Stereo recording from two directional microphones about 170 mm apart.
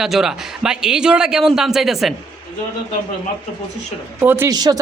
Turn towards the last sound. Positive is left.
turn(degrees=-20)  # may be behind; listen again after turning